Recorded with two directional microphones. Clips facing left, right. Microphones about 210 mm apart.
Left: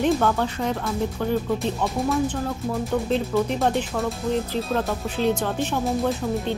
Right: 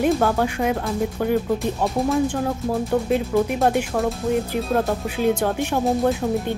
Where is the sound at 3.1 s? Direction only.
10° right (ahead or behind).